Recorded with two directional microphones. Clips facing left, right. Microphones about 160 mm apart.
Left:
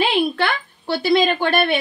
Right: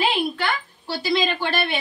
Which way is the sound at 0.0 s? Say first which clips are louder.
Left 4 dB; 65° left (ahead or behind).